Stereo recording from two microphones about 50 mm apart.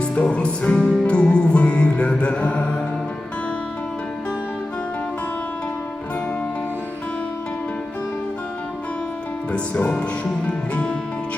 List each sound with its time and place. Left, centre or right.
0.0 s music: left
9.5 s music: left